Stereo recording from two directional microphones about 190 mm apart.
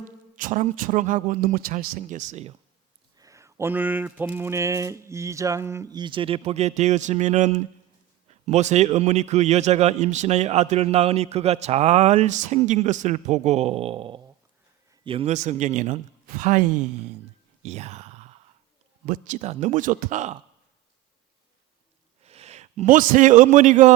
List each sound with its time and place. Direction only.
0.3 s speech: 40° right (ahead or behind)
3.2 s a sound: 15° right (ahead or behind); by 7.6 s 40° right (ahead or behind)
8.3 s a man's voice: 35° right (ahead or behind)
17.6 s groan: 35° right (ahead or behind)
19.0 s a man's voice: 45° right (ahead or behind)
22.2 s a man's voice: 35° right (ahead or behind)